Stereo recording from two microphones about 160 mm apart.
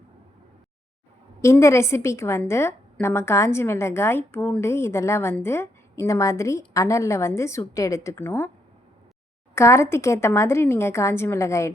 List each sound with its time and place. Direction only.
1.4 s a woman's voice: 20° left (ahead or behind)
9.6 s a woman's voice: 15° left (ahead or behind)